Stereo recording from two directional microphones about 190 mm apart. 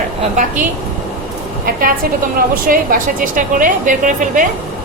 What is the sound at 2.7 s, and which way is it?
Speech, 50° right (ahead or behind).